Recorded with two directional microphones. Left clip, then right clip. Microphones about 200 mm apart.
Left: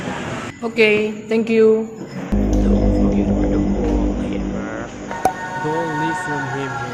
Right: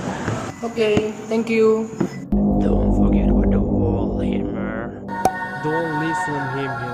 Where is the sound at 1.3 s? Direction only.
25° left (ahead or behind).